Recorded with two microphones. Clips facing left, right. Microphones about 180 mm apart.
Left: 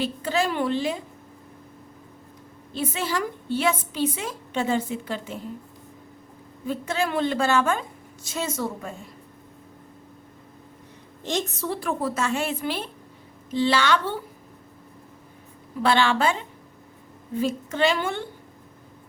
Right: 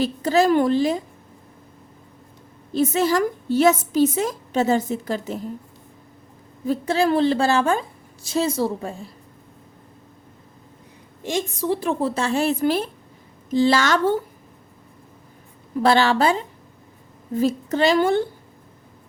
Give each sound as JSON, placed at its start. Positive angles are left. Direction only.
{"t": 0.0, "sound": "a woman's voice", "side_deg": -40}
{"t": 2.7, "sound": "a woman's voice", "side_deg": -40}
{"t": 6.7, "sound": "a woman's voice", "side_deg": -35}
{"t": 11.2, "sound": "a woman's voice", "side_deg": -10}
{"t": 15.8, "sound": "a woman's voice", "side_deg": -40}